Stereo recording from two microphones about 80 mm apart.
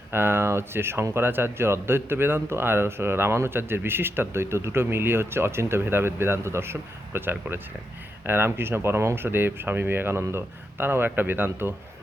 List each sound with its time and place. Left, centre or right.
0.1 s speech: right